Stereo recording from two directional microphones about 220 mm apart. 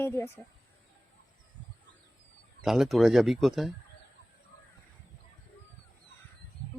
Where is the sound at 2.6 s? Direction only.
Centre (ahead or behind).